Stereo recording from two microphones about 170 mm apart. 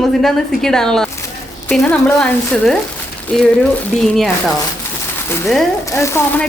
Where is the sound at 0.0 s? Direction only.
Centre (ahead or behind).